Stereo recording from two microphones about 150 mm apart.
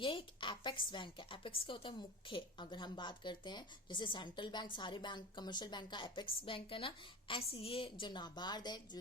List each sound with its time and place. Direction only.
0.0 s speech: 35° left (ahead or behind)